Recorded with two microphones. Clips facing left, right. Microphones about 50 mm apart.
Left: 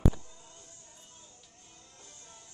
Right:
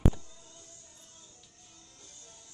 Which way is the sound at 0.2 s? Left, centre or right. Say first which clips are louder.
Left 1 dB; left.